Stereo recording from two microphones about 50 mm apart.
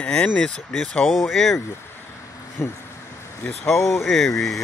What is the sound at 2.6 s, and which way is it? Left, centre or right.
Speech, left.